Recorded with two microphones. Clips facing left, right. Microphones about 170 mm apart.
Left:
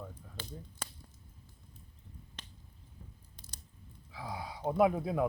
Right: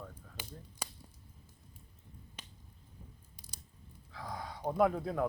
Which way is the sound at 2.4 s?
10° right (ahead or behind).